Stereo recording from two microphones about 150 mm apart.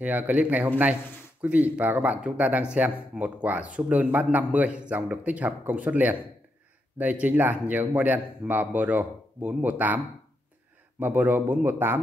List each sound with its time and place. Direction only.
0.0 s speech: 10° right (ahead or behind)
11.0 s speech: 10° right (ahead or behind)